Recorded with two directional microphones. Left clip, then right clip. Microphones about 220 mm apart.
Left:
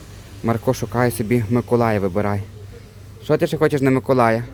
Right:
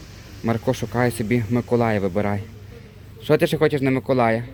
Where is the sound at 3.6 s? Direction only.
20° left (ahead or behind).